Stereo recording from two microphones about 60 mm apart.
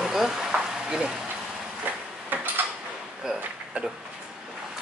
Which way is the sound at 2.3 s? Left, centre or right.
Right.